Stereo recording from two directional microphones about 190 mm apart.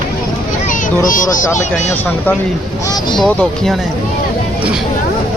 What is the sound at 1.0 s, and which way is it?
Speech, 45° left (ahead or behind).